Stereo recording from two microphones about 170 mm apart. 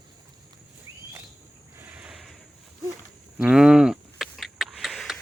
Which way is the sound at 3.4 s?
5° right (ahead or behind).